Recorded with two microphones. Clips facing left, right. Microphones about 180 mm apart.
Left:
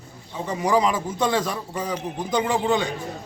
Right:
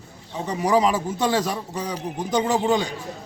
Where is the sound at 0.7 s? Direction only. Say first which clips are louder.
Right 1 dB; 35° right (ahead or behind).